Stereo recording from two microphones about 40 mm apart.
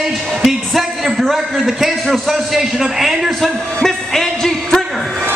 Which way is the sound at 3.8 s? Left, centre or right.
Centre.